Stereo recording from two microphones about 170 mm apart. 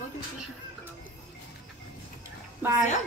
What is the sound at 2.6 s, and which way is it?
Speech, 15° right (ahead or behind).